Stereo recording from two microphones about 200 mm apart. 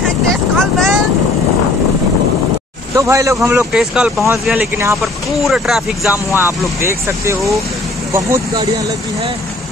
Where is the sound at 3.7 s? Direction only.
5° right (ahead or behind).